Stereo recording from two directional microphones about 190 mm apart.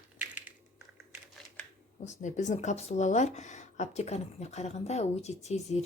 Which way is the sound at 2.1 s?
40° left (ahead or behind).